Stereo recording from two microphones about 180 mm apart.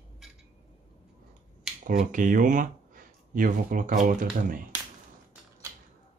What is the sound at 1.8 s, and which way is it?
Speech, 45° right (ahead or behind).